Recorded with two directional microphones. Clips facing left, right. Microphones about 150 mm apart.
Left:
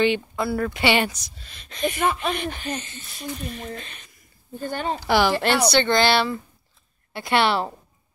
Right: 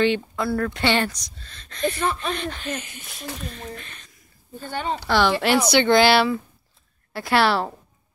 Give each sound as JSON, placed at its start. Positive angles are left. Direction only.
{"t": 0.0, "sound": "speech", "side_deg": 5}
{"t": 2.7, "sound": "speech", "side_deg": -5}
{"t": 3.5, "sound": "speech", "side_deg": 20}
{"t": 4.6, "sound": "a woman's voice", "side_deg": 45}
{"t": 5.0, "sound": "speech", "side_deg": 10}
{"t": 5.7, "sound": "a woman's voice", "side_deg": -10}